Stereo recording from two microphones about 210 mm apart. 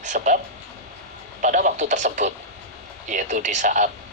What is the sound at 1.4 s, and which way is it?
Speech, 40° right (ahead or behind).